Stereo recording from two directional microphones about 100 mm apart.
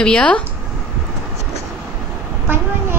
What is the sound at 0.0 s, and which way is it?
Speech, 10° left (ahead or behind).